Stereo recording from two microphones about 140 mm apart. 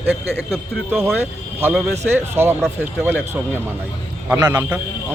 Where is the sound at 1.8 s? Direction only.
15° right (ahead or behind).